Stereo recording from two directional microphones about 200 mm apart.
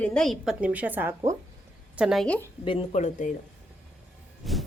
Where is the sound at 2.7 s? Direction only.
30° left (ahead or behind).